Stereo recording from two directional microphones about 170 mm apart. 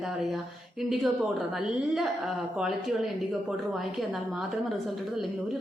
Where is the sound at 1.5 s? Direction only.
Centre (ahead or behind).